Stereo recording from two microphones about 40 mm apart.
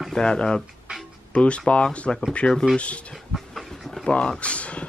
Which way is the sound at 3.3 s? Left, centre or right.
Centre.